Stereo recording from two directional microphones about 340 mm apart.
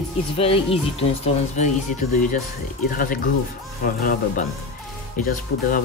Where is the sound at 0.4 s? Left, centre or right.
Centre.